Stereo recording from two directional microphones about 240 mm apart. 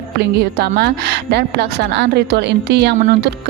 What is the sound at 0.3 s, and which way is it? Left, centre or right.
A woman's voice, right.